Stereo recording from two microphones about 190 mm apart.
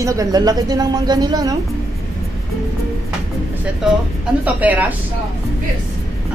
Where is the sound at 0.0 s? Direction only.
15° right (ahead or behind).